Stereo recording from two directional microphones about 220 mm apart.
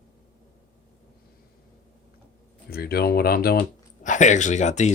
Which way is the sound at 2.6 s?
45° left (ahead or behind).